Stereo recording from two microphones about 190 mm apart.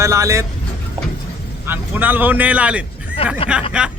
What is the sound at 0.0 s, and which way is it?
Speech, 15° right (ahead or behind).